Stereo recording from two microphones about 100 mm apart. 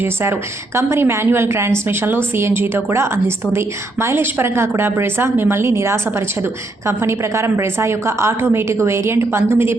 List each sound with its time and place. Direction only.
0.0 s a woman's voice: 25° right (ahead or behind)